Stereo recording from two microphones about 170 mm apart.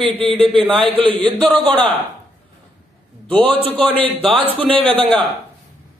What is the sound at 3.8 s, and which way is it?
A man's voice, 30° right (ahead or behind).